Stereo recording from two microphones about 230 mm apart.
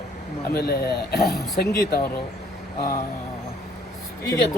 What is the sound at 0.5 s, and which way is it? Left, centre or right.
Speech, left.